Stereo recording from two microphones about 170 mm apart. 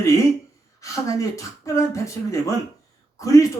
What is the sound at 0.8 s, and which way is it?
Speech, 20° left (ahead or behind).